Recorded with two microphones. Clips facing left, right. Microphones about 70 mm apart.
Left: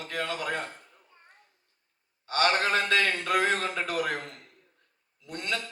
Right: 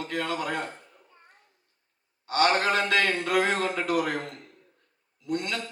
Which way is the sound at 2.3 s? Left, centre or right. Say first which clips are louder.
Right 2 dB; right.